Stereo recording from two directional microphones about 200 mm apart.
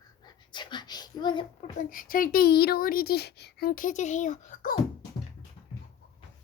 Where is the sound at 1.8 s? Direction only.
45° left (ahead or behind).